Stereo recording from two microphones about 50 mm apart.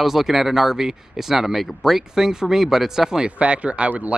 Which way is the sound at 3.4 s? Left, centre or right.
Right.